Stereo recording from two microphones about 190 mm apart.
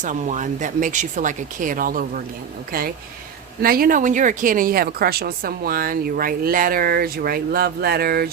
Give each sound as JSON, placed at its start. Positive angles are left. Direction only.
{"t": 0.0, "sound": "speech", "side_deg": -40}
{"t": 3.6, "sound": "speech", "side_deg": -50}